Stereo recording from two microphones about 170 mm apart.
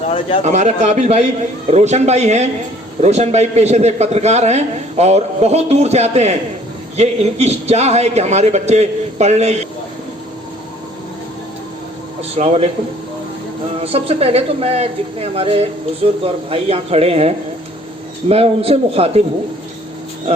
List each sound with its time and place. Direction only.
0.1 s speech: 35° left (ahead or behind)
0.4 s a man's voice: 45° right (ahead or behind)
12.4 s a man's voice: 40° right (ahead or behind)
13.8 s a man's voice: 35° right (ahead or behind)